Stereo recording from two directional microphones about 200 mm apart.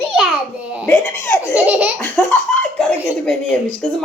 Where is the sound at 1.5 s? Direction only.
5° right (ahead or behind).